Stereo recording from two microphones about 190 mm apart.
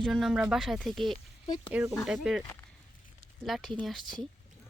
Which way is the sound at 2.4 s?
15° left (ahead or behind).